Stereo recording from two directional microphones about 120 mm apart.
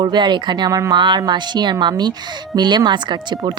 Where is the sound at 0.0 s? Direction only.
40° right (ahead or behind).